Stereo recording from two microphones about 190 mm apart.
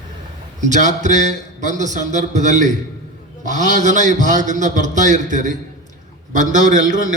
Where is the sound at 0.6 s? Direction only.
40° right (ahead or behind).